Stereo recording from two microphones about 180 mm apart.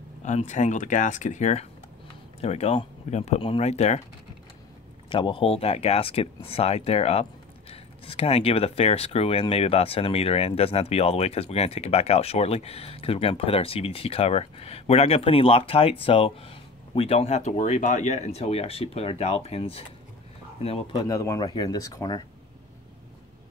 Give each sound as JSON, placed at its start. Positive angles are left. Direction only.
{"t": 0.2, "sound": "speech", "side_deg": 40}
{"t": 5.1, "sound": "speech", "side_deg": 25}
{"t": 21.0, "sound": "speech", "side_deg": 20}